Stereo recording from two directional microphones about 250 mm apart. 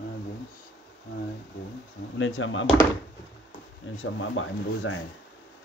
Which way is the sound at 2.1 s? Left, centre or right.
Left.